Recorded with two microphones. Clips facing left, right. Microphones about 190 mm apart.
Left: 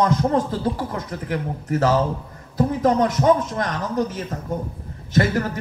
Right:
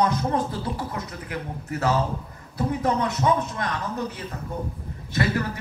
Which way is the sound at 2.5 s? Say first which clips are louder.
Left 6 dB; 45° left (ahead or behind).